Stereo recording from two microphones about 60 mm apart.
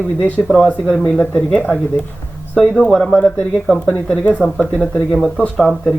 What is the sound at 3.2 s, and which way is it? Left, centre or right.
Speech, centre.